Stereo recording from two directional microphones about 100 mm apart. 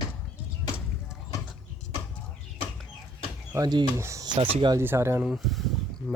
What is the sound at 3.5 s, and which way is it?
Speech, 45° right (ahead or behind).